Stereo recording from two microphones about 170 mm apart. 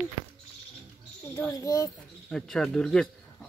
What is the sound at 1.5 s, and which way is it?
Speech, 20° left (ahead or behind).